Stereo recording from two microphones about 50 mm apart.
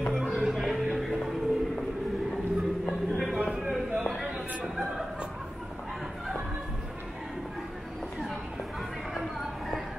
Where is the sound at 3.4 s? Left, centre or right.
Centre.